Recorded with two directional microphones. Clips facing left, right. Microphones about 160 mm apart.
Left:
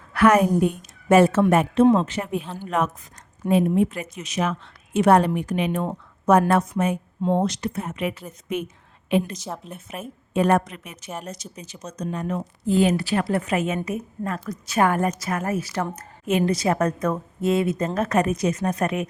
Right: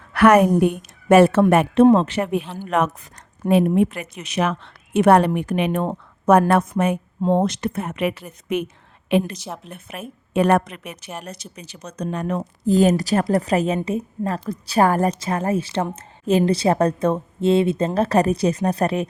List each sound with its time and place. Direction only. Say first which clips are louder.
0.1 s a woman's voice: right 3 dB; 70° right (ahead or behind)
3.4 s speech: right 3 dB; 40° right (ahead or behind)
3.8 s speech: right 2 dB; 65° right (ahead or behind)
7.2 s a woman's voice: right 3 dB; 50° right (ahead or behind); by 12.4 s 65° right (ahead or behind)
12.4 s a woman's voice: right 3 dB; 40° right (ahead or behind)